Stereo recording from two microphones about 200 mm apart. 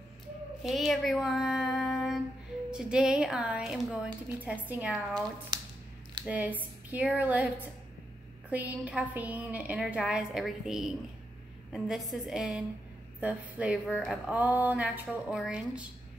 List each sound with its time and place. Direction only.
0.7 s female singing: centre (ahead or behind)
2.7 s a woman's voice: 5° right (ahead or behind)
6.2 s a woman's voice: 5° right (ahead or behind)